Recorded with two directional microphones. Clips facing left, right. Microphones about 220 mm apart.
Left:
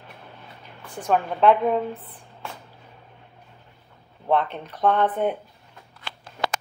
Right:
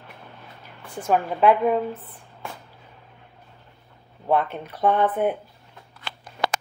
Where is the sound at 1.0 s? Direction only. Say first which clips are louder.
Even; 5° right (ahead or behind).